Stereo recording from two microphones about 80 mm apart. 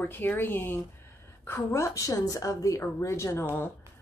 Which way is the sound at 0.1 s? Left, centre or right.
Left.